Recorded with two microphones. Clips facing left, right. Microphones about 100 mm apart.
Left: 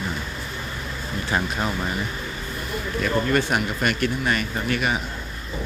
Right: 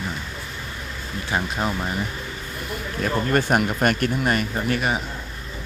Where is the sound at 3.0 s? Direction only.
40° right (ahead or behind).